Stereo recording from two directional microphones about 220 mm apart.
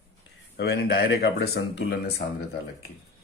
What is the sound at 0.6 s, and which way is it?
Speech, 45° left (ahead or behind).